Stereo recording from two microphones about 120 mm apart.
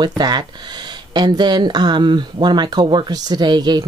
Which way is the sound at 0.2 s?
35° right (ahead or behind).